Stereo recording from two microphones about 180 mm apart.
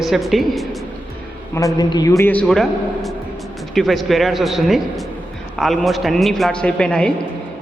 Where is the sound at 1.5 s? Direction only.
20° left (ahead or behind).